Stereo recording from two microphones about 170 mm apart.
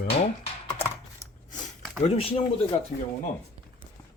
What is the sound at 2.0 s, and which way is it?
Speech, 35° left (ahead or behind).